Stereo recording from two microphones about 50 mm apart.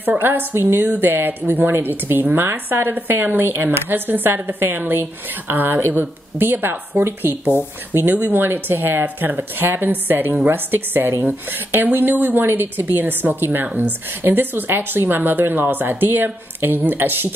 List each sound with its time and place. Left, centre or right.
0.0 s a woman's voice: right